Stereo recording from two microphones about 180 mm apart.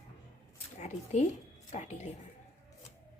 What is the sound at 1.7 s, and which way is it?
Speech, 40° left (ahead or behind).